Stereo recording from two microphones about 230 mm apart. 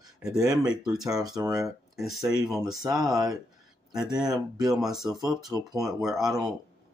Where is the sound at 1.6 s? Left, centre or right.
Centre.